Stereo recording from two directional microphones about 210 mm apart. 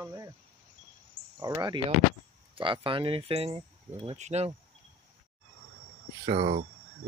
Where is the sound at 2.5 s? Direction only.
25° right (ahead or behind).